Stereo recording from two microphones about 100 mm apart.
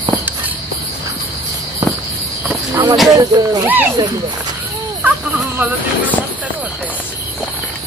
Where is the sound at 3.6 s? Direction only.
20° right (ahead or behind).